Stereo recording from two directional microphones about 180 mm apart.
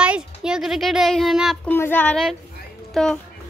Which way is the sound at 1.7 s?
10° left (ahead or behind).